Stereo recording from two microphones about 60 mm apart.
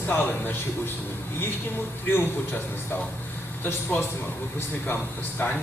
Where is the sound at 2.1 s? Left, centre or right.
Left.